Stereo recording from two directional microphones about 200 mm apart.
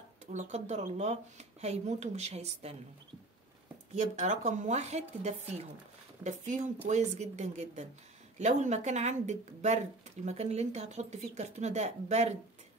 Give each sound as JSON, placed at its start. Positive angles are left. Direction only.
{"t": 0.3, "sound": "speech", "side_deg": -35}
{"t": 3.9, "sound": "speech", "side_deg": -35}
{"t": 6.2, "sound": "speech", "side_deg": -40}